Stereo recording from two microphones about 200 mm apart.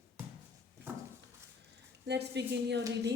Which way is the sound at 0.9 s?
10° right (ahead or behind).